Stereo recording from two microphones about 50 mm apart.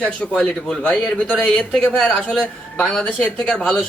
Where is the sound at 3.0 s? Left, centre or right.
Left.